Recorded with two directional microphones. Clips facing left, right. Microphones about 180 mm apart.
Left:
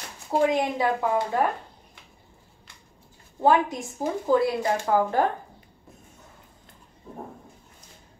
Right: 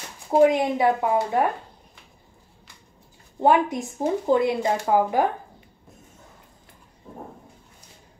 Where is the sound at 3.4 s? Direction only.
20° right (ahead or behind).